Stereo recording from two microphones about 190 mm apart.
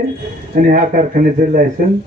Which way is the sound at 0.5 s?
40° right (ahead or behind).